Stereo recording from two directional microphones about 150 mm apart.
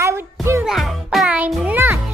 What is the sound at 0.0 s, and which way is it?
Music, 20° right (ahead or behind).